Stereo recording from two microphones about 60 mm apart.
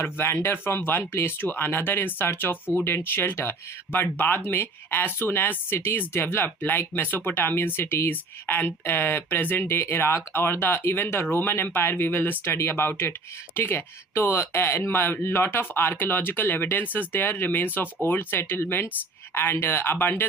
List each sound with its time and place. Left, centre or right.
0.0 s speech: left